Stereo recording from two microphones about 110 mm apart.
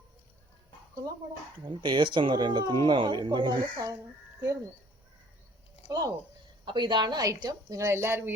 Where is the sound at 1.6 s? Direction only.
45° right (ahead or behind).